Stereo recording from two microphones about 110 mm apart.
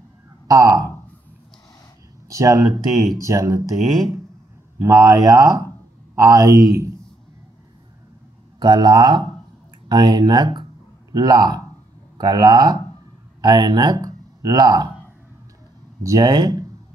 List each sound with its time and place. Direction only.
0.5 s speech: 35° right (ahead or behind)
2.2 s speech: 30° right (ahead or behind)
3.7 s speech: centre (ahead or behind)
4.8 s speech: 35° right (ahead or behind)
8.5 s speech: 40° right (ahead or behind)
16.0 s speech: 30° right (ahead or behind)